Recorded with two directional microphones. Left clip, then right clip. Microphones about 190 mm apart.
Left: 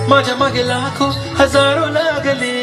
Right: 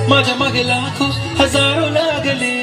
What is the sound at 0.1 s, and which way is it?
Speech, 5° right (ahead or behind).